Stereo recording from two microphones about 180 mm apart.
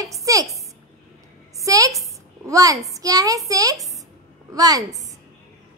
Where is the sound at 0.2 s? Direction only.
20° right (ahead or behind).